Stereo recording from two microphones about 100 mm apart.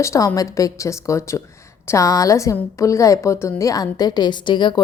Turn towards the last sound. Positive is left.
turn(degrees=50)  # may be behind; listen again after turning